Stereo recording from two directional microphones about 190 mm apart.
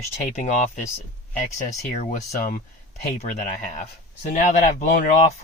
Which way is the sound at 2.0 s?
35° left (ahead or behind).